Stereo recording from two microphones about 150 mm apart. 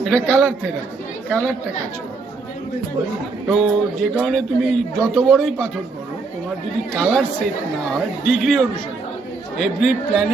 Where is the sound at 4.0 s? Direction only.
Centre (ahead or behind).